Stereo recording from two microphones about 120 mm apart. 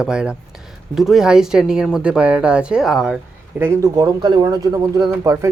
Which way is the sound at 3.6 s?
25° right (ahead or behind).